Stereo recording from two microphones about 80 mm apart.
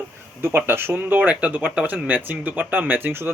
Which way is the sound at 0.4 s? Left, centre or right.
Right.